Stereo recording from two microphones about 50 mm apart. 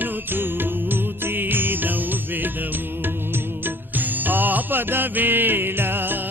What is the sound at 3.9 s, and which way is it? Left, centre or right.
Music, right.